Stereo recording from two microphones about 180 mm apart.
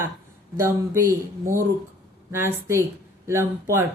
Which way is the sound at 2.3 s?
15° right (ahead or behind).